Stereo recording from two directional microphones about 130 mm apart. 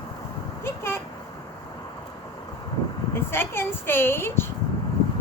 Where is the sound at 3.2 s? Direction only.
15° left (ahead or behind).